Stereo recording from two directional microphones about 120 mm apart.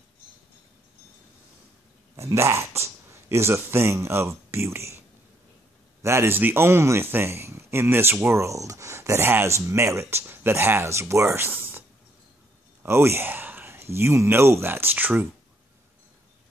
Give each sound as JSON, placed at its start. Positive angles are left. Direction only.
{"t": 2.1, "sound": "speech", "side_deg": -25}
{"t": 6.0, "sound": "speech", "side_deg": -20}
{"t": 12.8, "sound": "speech", "side_deg": -20}